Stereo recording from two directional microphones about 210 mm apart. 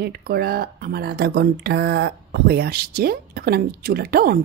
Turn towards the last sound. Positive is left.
turn(degrees=-45)  # may be behind; listen again after turning